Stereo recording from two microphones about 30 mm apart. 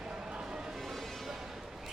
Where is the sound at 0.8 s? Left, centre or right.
Centre.